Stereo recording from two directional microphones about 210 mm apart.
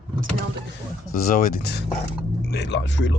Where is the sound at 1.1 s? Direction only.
45° left (ahead or behind).